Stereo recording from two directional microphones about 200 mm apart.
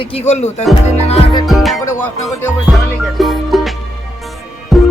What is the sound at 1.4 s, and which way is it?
Music, centre (ahead or behind).